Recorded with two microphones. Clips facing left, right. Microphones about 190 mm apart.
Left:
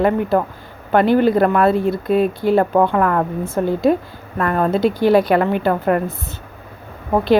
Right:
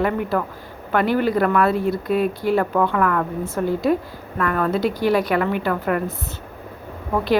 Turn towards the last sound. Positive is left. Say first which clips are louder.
# left 5 dB
turn(degrees=25)  # may be behind; listen again after turning